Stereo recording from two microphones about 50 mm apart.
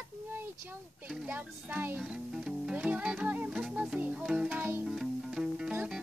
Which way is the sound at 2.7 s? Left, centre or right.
Right.